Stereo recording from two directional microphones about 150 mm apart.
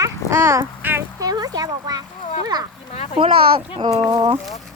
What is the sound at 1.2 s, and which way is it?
A child's voice, 25° right (ahead or behind).